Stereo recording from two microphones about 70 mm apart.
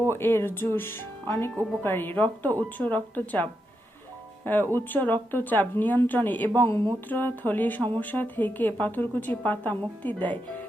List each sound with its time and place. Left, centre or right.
0.1 s speech: left
4.7 s speech: left